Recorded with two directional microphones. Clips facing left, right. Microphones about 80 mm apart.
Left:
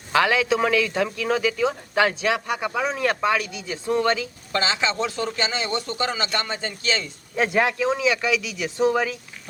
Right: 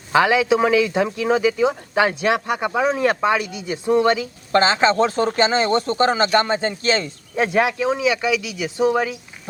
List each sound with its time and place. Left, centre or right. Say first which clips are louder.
0.1 s a man's voice: right 4 dB; centre
4.5 s speech: right 8 dB; right
7.3 s a man's voice: right 2 dB; centre